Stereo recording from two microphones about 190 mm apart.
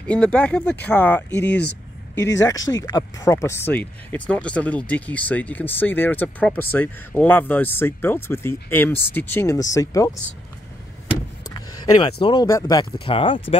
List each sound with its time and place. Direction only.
0.0 s speech: 5° left (ahead or behind)
1.5 s speech: 65° left (ahead or behind)
2.1 s speech: 15° left (ahead or behind)
11.4 s vehicle: 20° left (ahead or behind)
12.4 s speech: 15° left (ahead or behind)